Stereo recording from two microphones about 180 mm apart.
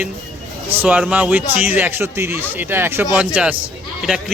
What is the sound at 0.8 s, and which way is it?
A man's voice, 5° right (ahead or behind).